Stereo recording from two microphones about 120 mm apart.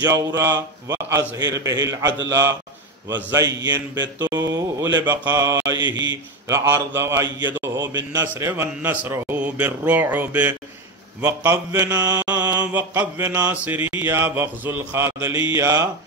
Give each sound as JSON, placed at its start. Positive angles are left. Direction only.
{"t": 0.0, "sound": "speech", "side_deg": -25}
{"t": 6.6, "sound": "speech", "side_deg": -20}
{"t": 11.9, "sound": "speech", "side_deg": -30}
{"t": 12.3, "sound": "speech", "side_deg": -15}